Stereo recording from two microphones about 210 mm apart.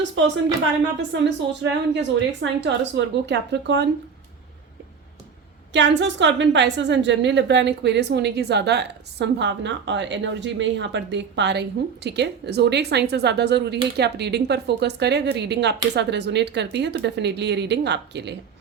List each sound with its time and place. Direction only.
1.2 s a woman's voice: 60° right (ahead or behind)
5.7 s a woman's voice: 60° right (ahead or behind)